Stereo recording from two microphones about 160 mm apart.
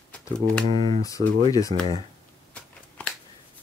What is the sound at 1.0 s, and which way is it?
Speech, 20° left (ahead or behind).